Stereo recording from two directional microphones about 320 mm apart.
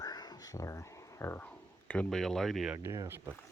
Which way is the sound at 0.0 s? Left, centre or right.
Centre.